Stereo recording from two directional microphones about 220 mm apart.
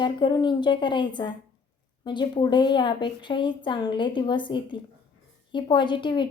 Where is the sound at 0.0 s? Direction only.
20° left (ahead or behind).